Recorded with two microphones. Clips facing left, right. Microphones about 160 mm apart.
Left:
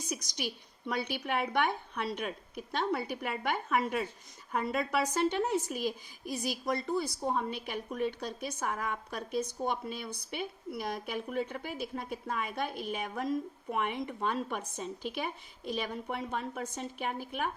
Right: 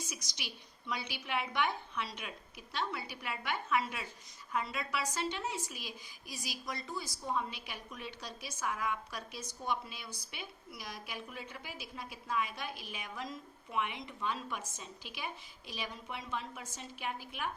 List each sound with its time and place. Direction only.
0.1 s speech: 50° left (ahead or behind)